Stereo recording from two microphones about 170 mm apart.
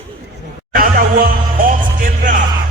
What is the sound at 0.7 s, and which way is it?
Music, 55° right (ahead or behind).